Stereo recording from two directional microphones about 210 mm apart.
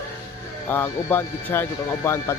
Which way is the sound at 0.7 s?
10° left (ahead or behind).